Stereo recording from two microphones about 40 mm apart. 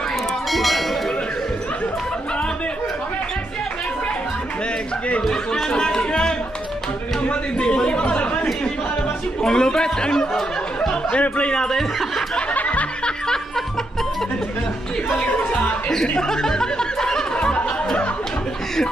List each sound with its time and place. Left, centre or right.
0.5 s bell: centre
5.3 s music: centre
7.2 s a man's voice: left
9.4 s speech: centre
10.8 s a sound: centre
11.1 s speech: left
11.5 s speech: centre
12.5 s music: left
15.2 s speech: left
15.9 s speech: centre